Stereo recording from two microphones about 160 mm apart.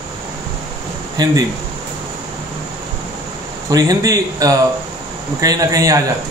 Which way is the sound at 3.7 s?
20° right (ahead or behind).